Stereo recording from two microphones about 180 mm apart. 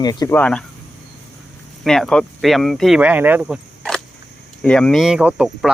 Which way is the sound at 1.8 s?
Centre (ahead or behind).